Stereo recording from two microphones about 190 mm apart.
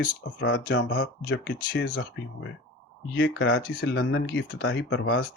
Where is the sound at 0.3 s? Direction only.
65° left (ahead or behind).